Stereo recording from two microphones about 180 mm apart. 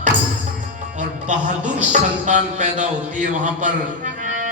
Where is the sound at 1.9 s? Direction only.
45° right (ahead or behind).